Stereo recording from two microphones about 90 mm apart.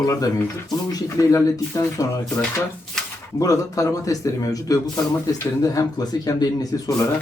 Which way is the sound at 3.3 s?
40° left (ahead or behind).